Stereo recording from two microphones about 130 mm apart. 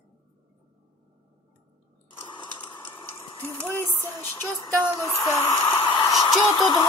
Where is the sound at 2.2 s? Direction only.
35° left (ahead or behind).